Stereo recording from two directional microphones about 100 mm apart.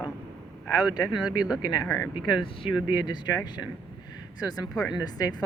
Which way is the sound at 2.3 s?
50° left (ahead or behind).